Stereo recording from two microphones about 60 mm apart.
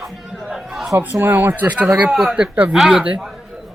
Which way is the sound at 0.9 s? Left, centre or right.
Right.